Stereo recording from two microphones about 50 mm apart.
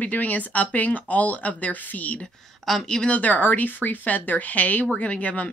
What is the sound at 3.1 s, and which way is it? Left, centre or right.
Speech, left.